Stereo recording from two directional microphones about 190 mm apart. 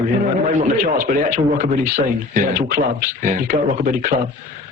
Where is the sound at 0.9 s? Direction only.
45° right (ahead or behind).